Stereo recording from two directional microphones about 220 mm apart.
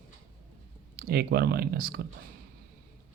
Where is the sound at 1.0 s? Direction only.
45° right (ahead or behind).